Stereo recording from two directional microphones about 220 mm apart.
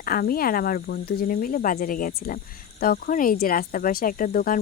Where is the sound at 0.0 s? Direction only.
40° left (ahead or behind).